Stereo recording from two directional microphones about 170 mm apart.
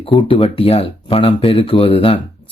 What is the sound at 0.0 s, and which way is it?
Speech, 30° left (ahead or behind).